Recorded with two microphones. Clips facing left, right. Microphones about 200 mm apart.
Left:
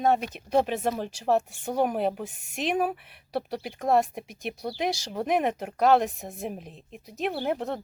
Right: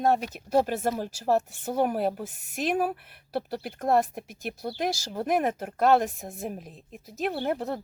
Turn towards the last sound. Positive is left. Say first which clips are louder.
# even
turn(degrees=-5)  # may be behind; listen again after turning